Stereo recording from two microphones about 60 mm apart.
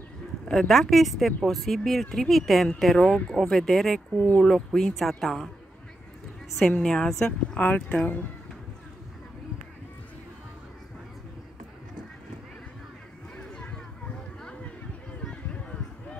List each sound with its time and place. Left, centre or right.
0.5 s speech: centre
6.8 s a woman's voice: centre
7.5 s speech: left
13.4 s a sound: centre